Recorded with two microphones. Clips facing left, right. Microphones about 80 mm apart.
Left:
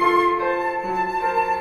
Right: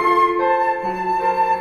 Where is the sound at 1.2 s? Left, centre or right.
Centre.